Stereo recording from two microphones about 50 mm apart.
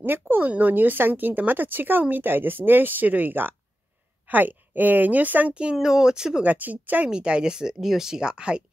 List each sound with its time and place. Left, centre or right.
0.0 s speech: right
5.5 s speech: right
6.4 s speech: right
7.1 s speech: centre